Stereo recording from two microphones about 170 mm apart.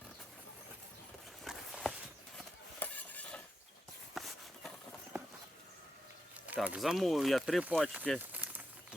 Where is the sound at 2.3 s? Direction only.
10° left (ahead or behind).